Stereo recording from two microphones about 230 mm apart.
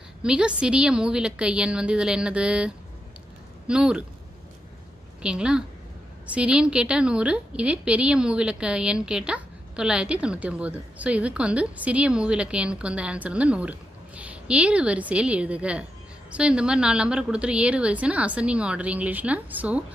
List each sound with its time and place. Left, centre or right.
0.2 s a woman's voice: centre
5.2 s a woman's voice: centre